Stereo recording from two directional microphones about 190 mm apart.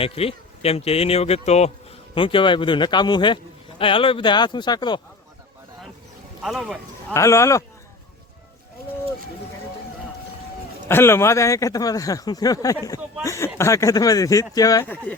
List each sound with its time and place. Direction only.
0.0 s a man's voice: 30° left (ahead or behind)
6.4 s speech: centre (ahead or behind)
7.1 s speech: 15° left (ahead or behind)
10.8 s speech: 10° left (ahead or behind)